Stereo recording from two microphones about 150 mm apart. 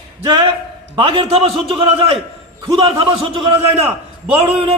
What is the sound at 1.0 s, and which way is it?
A man's voice, 40° right (ahead or behind).